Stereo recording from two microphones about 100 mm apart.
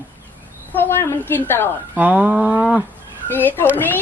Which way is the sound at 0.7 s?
20° left (ahead or behind).